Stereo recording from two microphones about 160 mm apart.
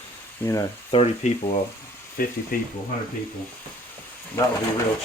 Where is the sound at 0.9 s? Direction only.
40° left (ahead or behind).